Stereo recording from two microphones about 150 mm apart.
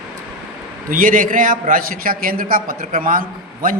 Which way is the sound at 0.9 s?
65° right (ahead or behind).